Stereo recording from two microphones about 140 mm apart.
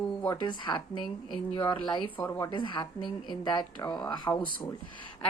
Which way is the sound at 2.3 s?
25° left (ahead or behind).